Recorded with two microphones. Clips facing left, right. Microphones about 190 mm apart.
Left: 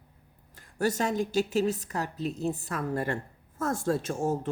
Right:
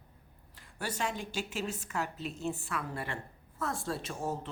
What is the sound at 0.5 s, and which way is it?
A woman's voice, 45° left (ahead or behind).